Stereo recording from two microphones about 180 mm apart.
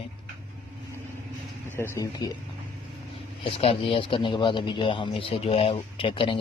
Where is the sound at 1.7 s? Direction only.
15° left (ahead or behind).